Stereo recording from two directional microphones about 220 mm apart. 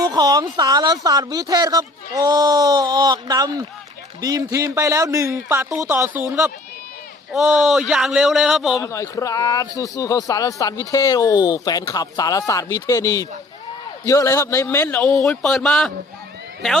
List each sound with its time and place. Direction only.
0.0 s a man's voice: 20° right (ahead or behind); by 8.8 s centre (ahead or behind)
8.8 s a man's voice: 15° left (ahead or behind)